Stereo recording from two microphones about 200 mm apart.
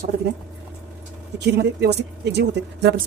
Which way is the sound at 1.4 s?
55° right (ahead or behind).